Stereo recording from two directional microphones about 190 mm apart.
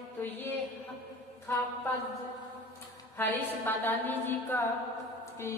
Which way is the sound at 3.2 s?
10° left (ahead or behind).